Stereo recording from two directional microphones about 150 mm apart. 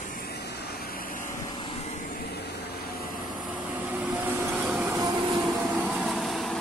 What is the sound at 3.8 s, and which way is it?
Vehicle, 10° right (ahead or behind).